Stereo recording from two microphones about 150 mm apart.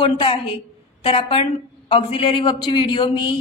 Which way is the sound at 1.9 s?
40° left (ahead or behind).